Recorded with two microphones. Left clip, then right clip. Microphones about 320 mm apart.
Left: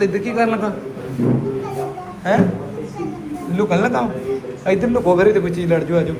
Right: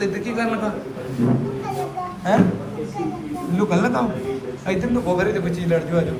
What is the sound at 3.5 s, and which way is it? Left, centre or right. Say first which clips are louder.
A man's voice: left 3 dB; centre.